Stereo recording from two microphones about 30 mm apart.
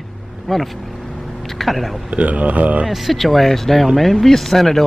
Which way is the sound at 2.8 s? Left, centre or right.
Centre.